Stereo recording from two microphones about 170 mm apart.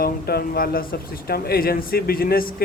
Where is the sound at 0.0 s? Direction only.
65° left (ahead or behind).